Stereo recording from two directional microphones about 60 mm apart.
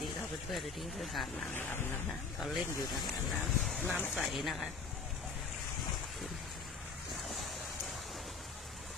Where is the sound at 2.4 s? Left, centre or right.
Centre.